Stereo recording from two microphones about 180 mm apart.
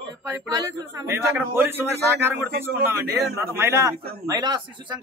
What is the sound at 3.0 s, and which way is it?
Speech, 60° right (ahead or behind).